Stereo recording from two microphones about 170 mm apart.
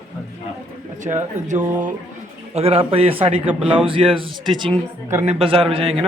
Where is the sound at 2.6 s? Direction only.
35° right (ahead or behind).